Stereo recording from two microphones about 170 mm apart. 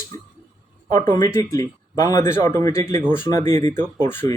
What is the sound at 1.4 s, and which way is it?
Speech, 20° left (ahead or behind).